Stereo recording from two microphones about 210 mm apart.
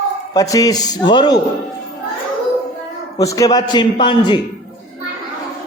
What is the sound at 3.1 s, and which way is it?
Speech, 15° left (ahead or behind).